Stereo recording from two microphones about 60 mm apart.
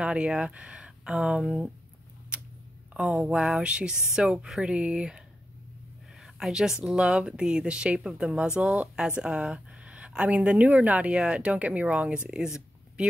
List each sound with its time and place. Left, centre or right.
0.0 s speech: centre
2.9 s speech: centre
6.2 s speech: centre